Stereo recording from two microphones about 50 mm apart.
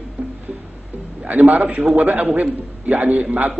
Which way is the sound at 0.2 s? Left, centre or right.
Right.